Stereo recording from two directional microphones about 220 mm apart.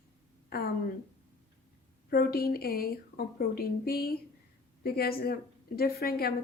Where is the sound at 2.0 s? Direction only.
45° left (ahead or behind).